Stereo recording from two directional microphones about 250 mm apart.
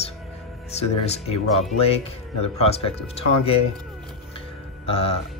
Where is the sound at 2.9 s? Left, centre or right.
Left.